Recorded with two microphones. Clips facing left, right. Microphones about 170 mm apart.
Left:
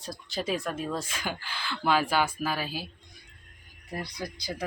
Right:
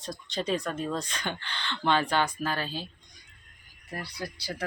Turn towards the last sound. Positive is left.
turn(degrees=15)  # may be behind; listen again after turning